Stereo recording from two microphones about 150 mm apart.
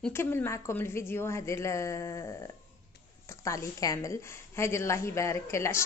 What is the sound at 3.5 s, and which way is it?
A woman's voice, 20° left (ahead or behind).